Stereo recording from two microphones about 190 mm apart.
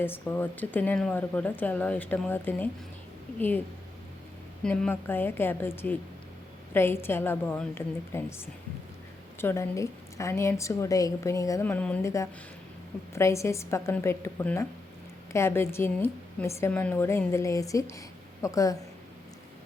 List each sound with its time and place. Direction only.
0.0 s a woman's voice: 10° left (ahead or behind)
4.6 s a woman's voice: 5° left (ahead or behind)